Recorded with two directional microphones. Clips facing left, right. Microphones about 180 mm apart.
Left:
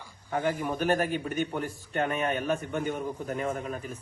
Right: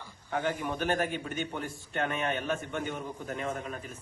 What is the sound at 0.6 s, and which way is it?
Speech, 5° left (ahead or behind).